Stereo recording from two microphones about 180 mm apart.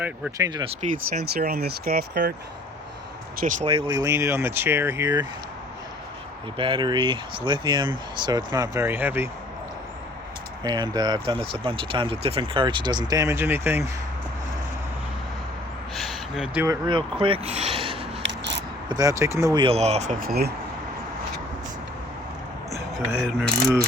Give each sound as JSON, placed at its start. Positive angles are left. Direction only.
{"t": 0.0, "sound": "speech", "side_deg": -15}
{"t": 1.2, "sound": "speech", "side_deg": -60}
{"t": 3.4, "sound": "speech", "side_deg": -35}
{"t": 4.1, "sound": "speech", "side_deg": -15}
{"t": 6.6, "sound": "speech", "side_deg": -25}
{"t": 10.6, "sound": "speech", "side_deg": -25}
{"t": 16.0, "sound": "gasp", "side_deg": 0}
{"t": 16.6, "sound": "speech", "side_deg": -25}
{"t": 18.2, "sound": "scissors", "side_deg": -75}
{"t": 18.9, "sound": "speech", "side_deg": -20}
{"t": 19.6, "sound": "speech", "side_deg": -35}
{"t": 23.2, "sound": "mechanisms", "side_deg": 0}